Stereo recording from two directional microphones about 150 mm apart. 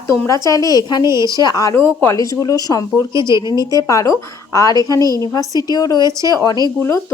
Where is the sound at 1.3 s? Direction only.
25° left (ahead or behind).